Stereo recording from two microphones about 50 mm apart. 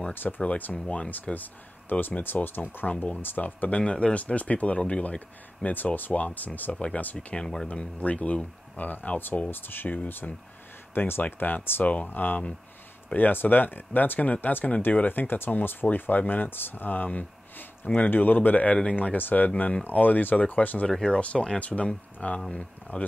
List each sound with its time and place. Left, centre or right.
0.1 s speech: left
0.8 s speech: left
1.2 s speech: left
2.9 s speech: left
7.2 s speech: centre
7.7 s speech: left
9.5 s speech: left
19.1 s speech: left